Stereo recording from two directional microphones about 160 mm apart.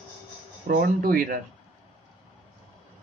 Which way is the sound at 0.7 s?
70° right (ahead or behind).